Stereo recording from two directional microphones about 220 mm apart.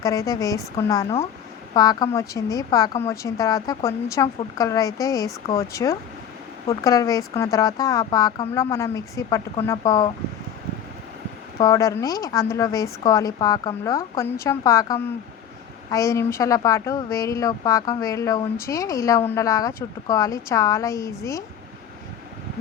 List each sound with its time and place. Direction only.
0.0 s a woman's voice: 15° left (ahead or behind)
11.5 s a woman's voice: 15° left (ahead or behind)